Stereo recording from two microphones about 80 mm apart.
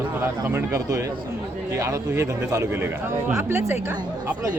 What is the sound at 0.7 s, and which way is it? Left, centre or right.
Speech, right.